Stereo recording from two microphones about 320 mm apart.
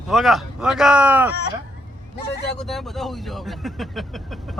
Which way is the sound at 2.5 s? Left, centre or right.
Centre.